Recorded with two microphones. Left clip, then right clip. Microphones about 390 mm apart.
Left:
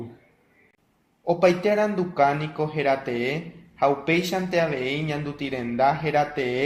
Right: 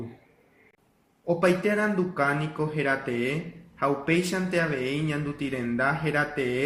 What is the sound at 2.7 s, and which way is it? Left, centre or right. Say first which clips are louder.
Speech: left 4 dB; centre.